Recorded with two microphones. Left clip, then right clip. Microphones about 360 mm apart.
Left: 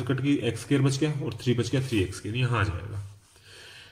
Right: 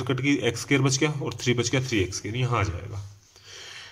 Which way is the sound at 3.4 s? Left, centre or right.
Centre.